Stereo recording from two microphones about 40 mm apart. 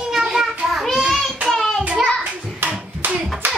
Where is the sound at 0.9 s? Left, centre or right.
Centre.